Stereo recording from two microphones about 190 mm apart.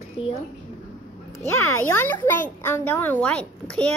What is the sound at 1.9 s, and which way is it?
A child's voice, 10° left (ahead or behind).